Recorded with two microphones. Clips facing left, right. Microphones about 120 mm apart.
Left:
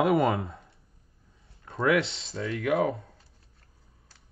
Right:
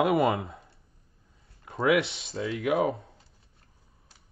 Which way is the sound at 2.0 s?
25° left (ahead or behind).